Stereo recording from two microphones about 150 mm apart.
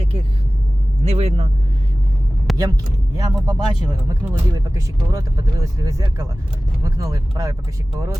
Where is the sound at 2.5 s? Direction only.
25° right (ahead or behind).